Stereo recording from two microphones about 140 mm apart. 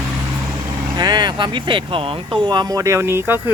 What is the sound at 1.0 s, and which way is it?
Speech, 30° right (ahead or behind).